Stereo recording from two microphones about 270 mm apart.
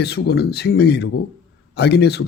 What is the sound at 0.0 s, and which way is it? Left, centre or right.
Speech, left.